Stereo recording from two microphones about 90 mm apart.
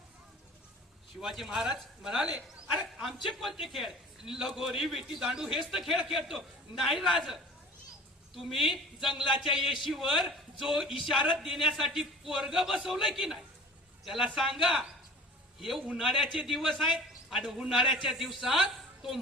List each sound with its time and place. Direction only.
1.2 s a man's voice: 5° right (ahead or behind)
8.5 s a man's voice: 5° right (ahead or behind)